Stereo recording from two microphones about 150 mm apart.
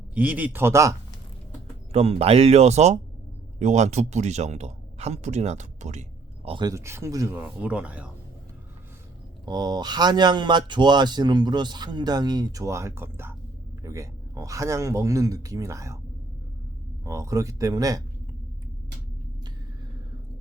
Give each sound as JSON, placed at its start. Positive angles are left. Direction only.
{"t": 0.1, "sound": "speech", "side_deg": -10}
{"t": 1.9, "sound": "a man's voice", "side_deg": -45}
{"t": 6.7, "sound": "speech", "side_deg": -20}
{"t": 9.5, "sound": "speech", "side_deg": -30}
{"t": 17.1, "sound": "speech", "side_deg": -20}